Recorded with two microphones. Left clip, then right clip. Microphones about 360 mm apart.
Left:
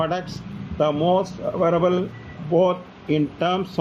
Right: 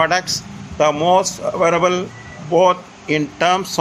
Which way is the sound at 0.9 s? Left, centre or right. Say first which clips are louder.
Right 6 dB; right.